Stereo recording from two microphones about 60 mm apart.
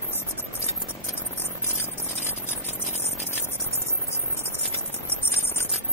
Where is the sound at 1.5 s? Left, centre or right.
Left.